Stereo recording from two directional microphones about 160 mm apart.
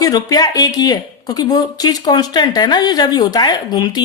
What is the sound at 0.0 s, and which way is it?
Speech, 25° left (ahead or behind).